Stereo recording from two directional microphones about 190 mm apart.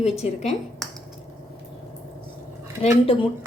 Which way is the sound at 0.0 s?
35° left (ahead or behind).